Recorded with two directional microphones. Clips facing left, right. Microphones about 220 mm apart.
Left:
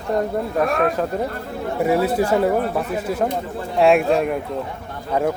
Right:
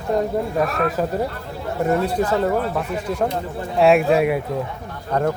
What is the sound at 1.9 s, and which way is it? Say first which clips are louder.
Speech: left 2 dB; 5° left (ahead or behind).